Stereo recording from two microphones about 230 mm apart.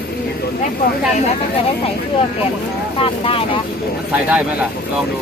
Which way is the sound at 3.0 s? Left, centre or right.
Left.